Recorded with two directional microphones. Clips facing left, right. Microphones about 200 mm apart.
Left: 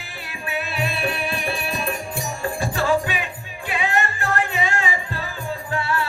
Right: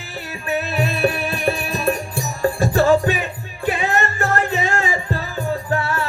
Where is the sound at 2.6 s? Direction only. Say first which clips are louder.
Right 6 dB; 45° right (ahead or behind).